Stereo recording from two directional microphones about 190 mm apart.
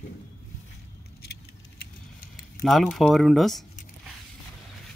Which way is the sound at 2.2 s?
50° left (ahead or behind).